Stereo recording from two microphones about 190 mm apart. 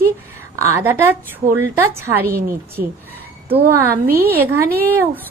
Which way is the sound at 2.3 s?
50° right (ahead or behind).